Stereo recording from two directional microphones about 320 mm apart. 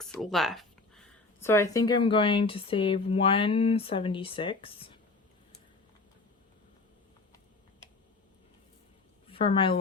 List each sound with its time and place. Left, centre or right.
0.0 s speech: centre
9.2 s a woman's voice: centre